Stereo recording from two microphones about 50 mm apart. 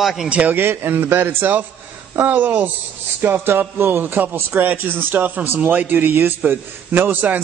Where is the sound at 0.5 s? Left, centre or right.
Right.